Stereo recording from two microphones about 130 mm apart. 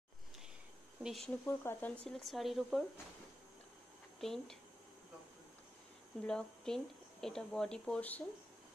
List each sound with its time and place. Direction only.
1.0 s speech: centre (ahead or behind)
1.4 s speech: 20° left (ahead or behind)
2.0 s speech: centre (ahead or behind)
4.2 s speech: centre (ahead or behind)
6.2 s speech: 5° left (ahead or behind)